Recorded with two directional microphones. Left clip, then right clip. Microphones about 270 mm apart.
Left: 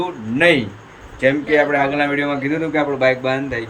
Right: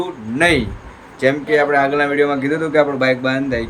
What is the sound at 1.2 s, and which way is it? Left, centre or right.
A man's voice, centre.